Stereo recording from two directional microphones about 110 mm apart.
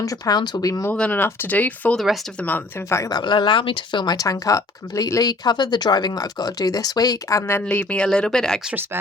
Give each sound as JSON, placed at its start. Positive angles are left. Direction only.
{"t": 0.0, "sound": "speech", "side_deg": 35}
{"t": 0.9, "sound": "speech", "side_deg": 15}
{"t": 2.9, "sound": "speech", "side_deg": 25}
{"t": 3.2, "sound": "speech", "side_deg": 45}
{"t": 7.6, "sound": "speech", "side_deg": 10}